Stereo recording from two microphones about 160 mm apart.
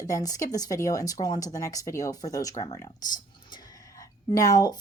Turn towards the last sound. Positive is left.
turn(degrees=20)  # may be behind; listen again after turning